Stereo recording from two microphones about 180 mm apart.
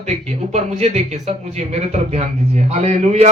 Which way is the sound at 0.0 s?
40° right (ahead or behind).